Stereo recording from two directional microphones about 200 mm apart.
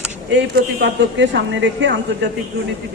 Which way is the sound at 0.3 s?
60° right (ahead or behind).